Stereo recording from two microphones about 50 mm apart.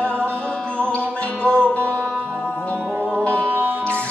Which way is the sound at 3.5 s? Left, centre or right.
Right.